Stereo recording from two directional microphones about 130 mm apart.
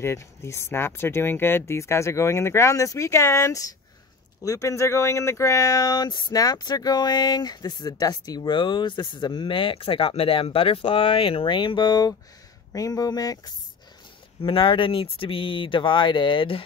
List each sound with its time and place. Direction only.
0.0 s speech: 20° left (ahead or behind)
14.4 s speech: 40° left (ahead or behind)